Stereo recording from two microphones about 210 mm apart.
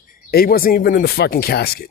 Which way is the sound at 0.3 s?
45° left (ahead or behind).